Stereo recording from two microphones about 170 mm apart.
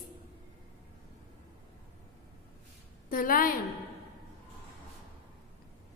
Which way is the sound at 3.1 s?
55° left (ahead or behind).